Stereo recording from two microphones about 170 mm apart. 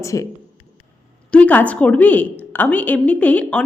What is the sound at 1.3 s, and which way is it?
A woman's voice, 10° left (ahead or behind).